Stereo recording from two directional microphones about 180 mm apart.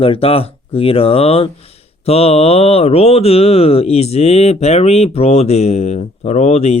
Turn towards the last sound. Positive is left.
turn(degrees=40)  # may be behind; listen again after turning